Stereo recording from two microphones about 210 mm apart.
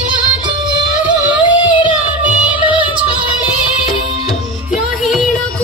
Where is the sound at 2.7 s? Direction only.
5° right (ahead or behind).